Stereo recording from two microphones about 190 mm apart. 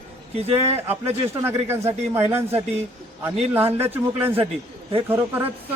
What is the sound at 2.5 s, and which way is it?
Speech, 35° right (ahead or behind).